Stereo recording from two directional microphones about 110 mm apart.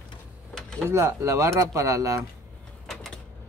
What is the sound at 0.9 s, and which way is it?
Speech, 25° right (ahead or behind).